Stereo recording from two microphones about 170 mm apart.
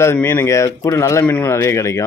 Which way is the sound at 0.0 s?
15° left (ahead or behind).